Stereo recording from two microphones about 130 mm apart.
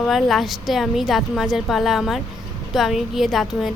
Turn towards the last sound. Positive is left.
turn(degrees=0)  # may be behind; listen again after turning